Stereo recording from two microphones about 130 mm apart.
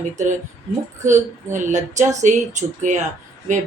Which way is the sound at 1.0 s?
70° right (ahead or behind).